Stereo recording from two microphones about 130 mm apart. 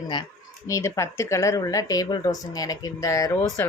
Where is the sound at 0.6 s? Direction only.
25° left (ahead or behind).